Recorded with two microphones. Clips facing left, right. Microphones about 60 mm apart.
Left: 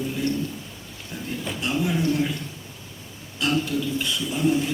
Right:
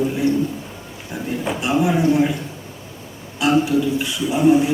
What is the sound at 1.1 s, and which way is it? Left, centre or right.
A man's voice, right.